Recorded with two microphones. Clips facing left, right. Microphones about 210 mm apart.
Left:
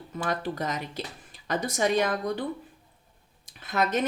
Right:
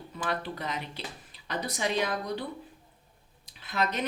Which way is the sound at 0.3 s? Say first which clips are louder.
Left 4 dB; 45° left (ahead or behind).